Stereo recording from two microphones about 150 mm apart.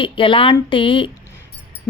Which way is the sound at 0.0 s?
35° left (ahead or behind).